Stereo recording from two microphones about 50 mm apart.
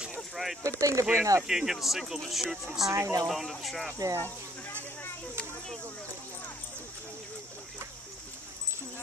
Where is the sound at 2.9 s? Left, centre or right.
Right.